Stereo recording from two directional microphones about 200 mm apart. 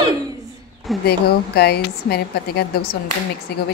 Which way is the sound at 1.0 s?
55° left (ahead or behind).